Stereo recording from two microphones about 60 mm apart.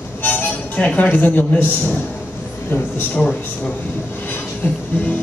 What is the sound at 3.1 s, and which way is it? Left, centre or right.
Speech, centre.